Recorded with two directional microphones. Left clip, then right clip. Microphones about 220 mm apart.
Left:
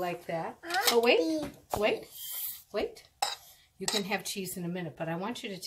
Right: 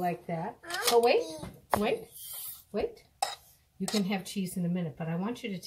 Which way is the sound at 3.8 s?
35° left (ahead or behind).